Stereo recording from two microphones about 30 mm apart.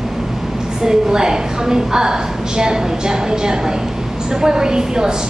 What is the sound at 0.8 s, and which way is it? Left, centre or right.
A woman's voice, right.